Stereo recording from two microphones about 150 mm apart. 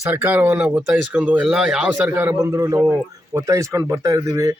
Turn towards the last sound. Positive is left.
turn(degrees=-20)  # may be behind; listen again after turning